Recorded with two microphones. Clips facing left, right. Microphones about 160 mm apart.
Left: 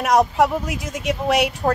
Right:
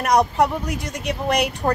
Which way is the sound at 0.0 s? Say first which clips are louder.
Left 1 dB; centre (ahead or behind).